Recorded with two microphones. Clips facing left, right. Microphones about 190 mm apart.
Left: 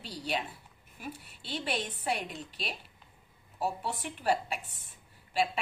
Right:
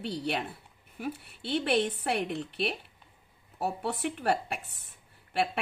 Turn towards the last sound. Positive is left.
turn(degrees=-60)  # may be behind; listen again after turning